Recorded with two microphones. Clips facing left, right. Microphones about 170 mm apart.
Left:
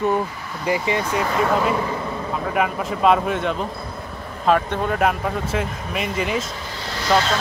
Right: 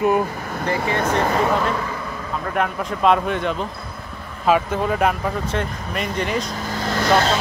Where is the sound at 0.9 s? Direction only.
55° right (ahead or behind).